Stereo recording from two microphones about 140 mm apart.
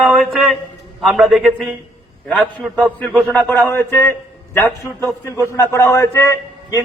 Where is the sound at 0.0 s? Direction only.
Centre (ahead or behind).